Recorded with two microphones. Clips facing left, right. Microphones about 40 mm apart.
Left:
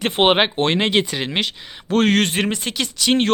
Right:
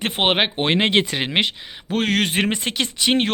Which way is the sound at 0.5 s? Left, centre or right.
Centre.